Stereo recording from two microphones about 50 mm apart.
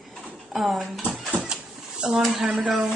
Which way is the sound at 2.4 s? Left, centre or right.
Centre.